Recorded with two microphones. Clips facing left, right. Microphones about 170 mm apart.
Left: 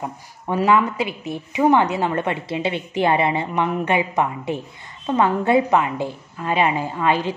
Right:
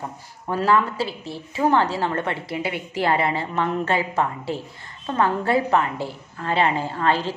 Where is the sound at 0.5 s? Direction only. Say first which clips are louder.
Left 2 dB; 15° left (ahead or behind).